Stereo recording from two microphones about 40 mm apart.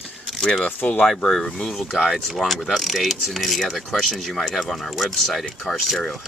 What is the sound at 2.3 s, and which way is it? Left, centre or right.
Speech, centre.